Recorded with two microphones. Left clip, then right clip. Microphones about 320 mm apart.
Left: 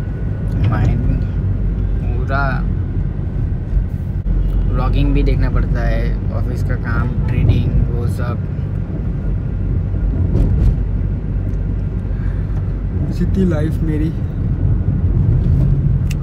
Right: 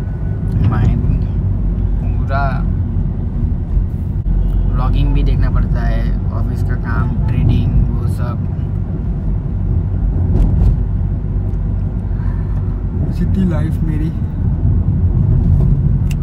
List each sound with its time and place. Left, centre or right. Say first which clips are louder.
0.6 s vehicle: right 1 dB; centre
2.3 s vehicle: even; centre
4.9 s vehicle: left 3 dB; centre
7.3 s speech: even; centre
13.2 s speech: left 3 dB; centre